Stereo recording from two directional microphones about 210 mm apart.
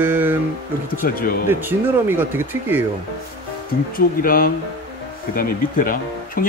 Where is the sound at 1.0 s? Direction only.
40° left (ahead or behind).